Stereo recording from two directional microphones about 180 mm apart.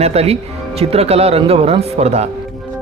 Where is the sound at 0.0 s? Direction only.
35° right (ahead or behind).